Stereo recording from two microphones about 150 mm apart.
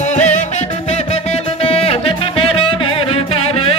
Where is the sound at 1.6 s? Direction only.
40° left (ahead or behind).